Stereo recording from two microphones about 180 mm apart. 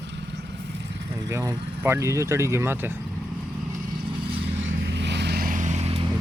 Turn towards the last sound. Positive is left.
turn(degrees=-35)  # may be behind; listen again after turning